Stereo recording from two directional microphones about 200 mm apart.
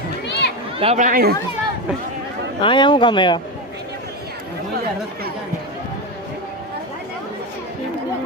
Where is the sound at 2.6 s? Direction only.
25° left (ahead or behind).